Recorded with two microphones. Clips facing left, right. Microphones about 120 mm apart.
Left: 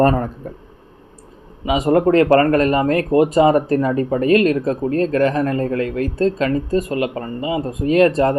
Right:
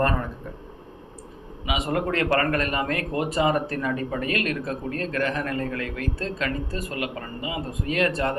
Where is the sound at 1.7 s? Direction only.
35° left (ahead or behind).